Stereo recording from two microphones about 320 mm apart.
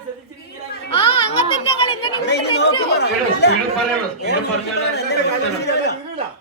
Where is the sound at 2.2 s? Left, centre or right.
Left.